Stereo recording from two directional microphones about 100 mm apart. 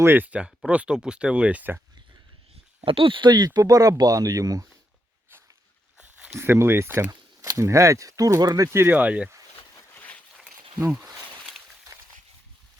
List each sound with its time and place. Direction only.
0.0 s speech: 20° right (ahead or behind)
2.8 s speech: 65° right (ahead or behind); by 4.7 s 35° right (ahead or behind)
6.0 s a sound: 15° right (ahead or behind)
6.3 s speech: 25° right (ahead or behind)
7.1 s speech: 35° right (ahead or behind); by 9.3 s 15° right (ahead or behind)
9.9 s a sound: 15° left (ahead or behind)
10.8 s speech: 5° right (ahead or behind)